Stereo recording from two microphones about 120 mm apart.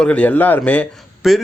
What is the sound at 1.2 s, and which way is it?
Speech, 5° right (ahead or behind).